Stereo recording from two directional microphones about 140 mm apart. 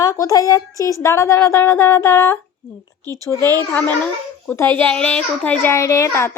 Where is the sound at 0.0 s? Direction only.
25° left (ahead or behind).